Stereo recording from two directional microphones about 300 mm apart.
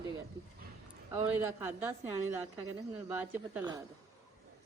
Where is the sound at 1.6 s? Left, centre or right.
Centre.